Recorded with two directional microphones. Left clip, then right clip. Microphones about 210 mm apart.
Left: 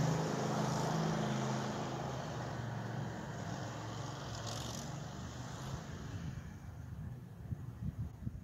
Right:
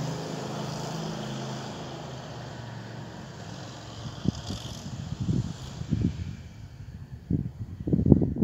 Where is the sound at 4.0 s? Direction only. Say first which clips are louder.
Right 8 dB; 20° left (ahead or behind).